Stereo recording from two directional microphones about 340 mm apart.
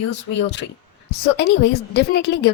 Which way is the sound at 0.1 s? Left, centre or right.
Left.